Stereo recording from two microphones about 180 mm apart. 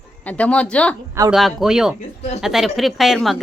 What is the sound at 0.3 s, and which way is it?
A woman's voice, 5° left (ahead or behind).